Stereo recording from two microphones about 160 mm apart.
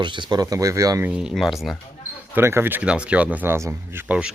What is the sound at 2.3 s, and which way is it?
Speech, 15° right (ahead or behind).